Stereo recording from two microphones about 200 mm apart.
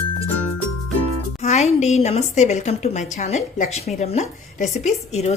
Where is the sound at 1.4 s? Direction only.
35° left (ahead or behind).